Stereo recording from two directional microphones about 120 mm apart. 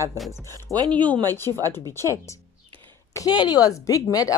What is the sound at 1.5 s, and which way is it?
Speech, 35° left (ahead or behind).